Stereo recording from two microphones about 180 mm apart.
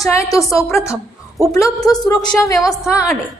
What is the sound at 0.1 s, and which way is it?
Speech, 15° left (ahead or behind).